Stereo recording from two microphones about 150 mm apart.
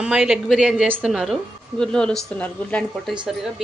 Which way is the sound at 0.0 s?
5° right (ahead or behind).